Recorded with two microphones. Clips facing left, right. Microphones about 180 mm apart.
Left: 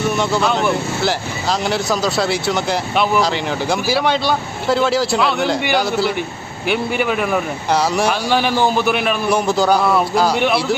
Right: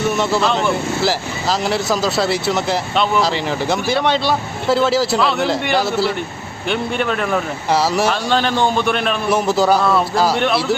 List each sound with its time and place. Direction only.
0.2 s speech: centre (ahead or behind)